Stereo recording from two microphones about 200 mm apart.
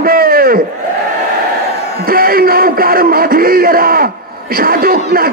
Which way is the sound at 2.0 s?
50° right (ahead or behind).